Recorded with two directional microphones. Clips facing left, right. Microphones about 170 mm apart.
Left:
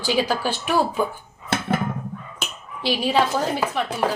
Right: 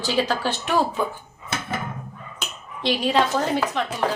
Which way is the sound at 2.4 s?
5° left (ahead or behind).